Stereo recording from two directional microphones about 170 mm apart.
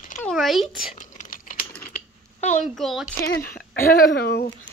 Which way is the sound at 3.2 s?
60° left (ahead or behind).